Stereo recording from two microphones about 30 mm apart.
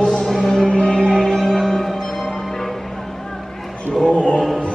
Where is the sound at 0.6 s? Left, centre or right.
Left.